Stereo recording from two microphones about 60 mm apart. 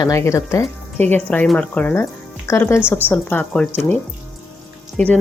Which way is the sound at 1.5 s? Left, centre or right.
Left.